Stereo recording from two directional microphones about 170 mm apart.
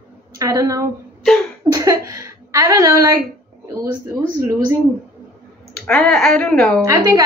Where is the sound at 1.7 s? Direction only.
20° right (ahead or behind).